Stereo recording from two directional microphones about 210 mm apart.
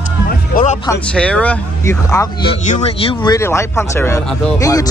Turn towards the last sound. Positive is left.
turn(degrees=15)  # may be behind; listen again after turning